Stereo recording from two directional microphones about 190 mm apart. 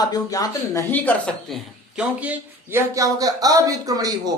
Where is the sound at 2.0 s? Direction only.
5° right (ahead or behind).